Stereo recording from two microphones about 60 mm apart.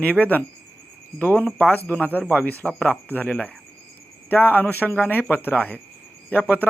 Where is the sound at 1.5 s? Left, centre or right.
Left.